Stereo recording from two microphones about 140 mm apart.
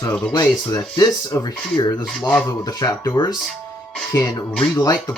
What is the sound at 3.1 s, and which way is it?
Rub, 30° left (ahead or behind).